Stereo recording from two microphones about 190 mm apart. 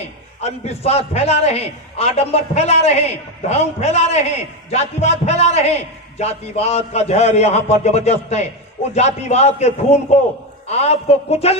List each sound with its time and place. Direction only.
0.4 s a man's voice: 35° left (ahead or behind)